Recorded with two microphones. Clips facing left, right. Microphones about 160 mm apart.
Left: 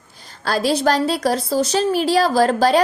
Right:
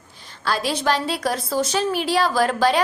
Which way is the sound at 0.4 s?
40° left (ahead or behind).